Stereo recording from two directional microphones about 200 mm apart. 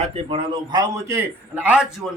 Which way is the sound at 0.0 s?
30° right (ahead or behind).